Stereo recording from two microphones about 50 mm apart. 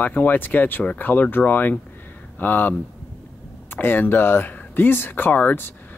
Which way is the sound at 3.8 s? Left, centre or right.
Left.